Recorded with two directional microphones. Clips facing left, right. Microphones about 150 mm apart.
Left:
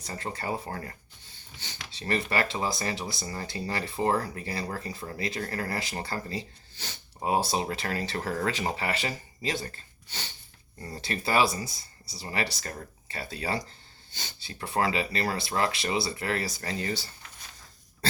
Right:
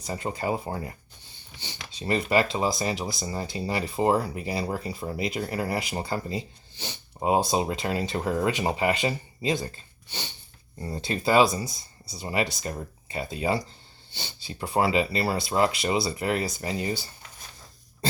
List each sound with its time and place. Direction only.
0.1 s speech: 15° right (ahead or behind)